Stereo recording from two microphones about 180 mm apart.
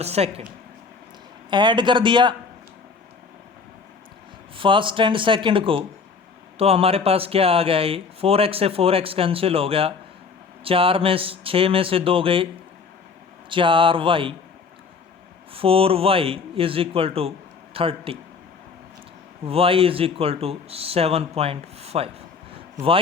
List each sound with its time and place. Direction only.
0.0 s speech: 35° right (ahead or behind)
1.5 s speech: 25° right (ahead or behind)
4.5 s speech: 30° right (ahead or behind)
13.5 s speech: 30° right (ahead or behind)
15.5 s speech: 30° right (ahead or behind)
19.5 s speech: 30° right (ahead or behind)